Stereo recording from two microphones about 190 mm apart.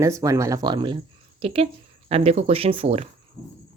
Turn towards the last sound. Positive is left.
turn(degrees=-30)  # may be behind; listen again after turning